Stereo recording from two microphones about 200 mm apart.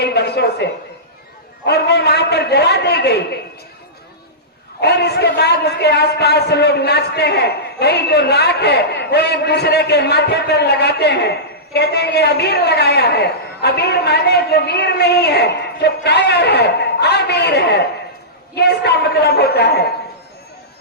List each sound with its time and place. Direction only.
0.0 s a sound: 55° left (ahead or behind)
1.6 s a man's voice: 55° left (ahead or behind)
4.8 s a man's voice: 55° left (ahead or behind)